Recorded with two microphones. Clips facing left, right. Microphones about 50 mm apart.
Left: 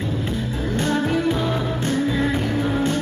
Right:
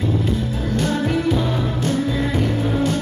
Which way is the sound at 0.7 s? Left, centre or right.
Left.